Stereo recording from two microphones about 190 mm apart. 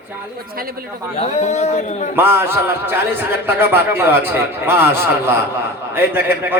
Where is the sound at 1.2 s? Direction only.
35° left (ahead or behind).